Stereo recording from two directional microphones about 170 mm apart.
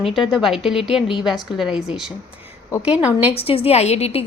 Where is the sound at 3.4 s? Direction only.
35° left (ahead or behind).